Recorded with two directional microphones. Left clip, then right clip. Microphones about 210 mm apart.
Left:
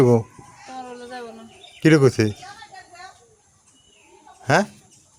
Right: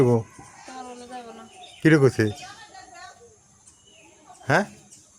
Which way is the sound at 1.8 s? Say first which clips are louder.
Left 2 dB; 15° left (ahead or behind).